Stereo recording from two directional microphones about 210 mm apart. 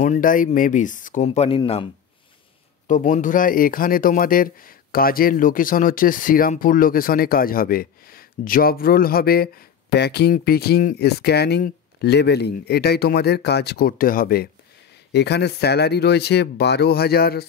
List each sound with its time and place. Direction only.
0.0 s speech: 40° left (ahead or behind)
2.9 s speech: 40° left (ahead or behind)